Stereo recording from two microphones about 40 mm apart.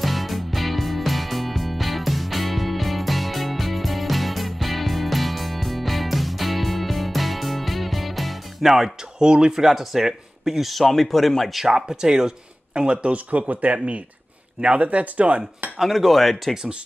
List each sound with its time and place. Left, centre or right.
0.0 s music: centre
9.2 s speech: centre
11.5 s speech: centre; by 15.4 s right
15.8 s speech: centre